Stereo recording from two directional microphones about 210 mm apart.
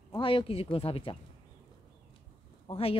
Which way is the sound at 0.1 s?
25° left (ahead or behind).